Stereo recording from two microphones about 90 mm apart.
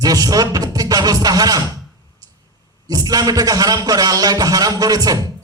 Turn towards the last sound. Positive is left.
turn(degrees=-45)  # may be behind; listen again after turning